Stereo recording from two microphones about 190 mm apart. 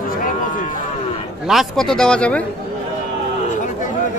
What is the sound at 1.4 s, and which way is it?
A man's voice, centre (ahead or behind).